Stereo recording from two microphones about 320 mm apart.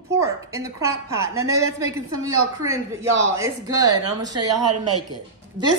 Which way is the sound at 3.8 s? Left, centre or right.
Right.